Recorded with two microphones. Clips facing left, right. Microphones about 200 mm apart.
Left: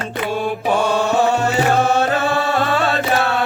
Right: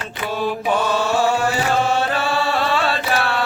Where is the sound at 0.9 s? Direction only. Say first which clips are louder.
Left 2 dB; 20° left (ahead or behind).